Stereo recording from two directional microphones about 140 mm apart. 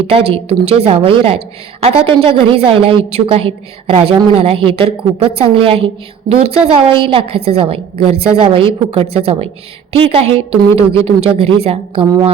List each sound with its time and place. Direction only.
0.1 s a woman's voice: 45° right (ahead or behind)